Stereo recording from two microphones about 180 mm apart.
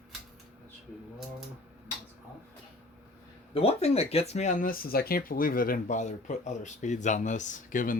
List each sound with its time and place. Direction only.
3.5 s speech: 35° left (ahead or behind)